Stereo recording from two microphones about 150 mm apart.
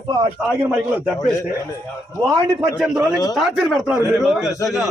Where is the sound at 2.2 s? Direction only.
10° right (ahead or behind).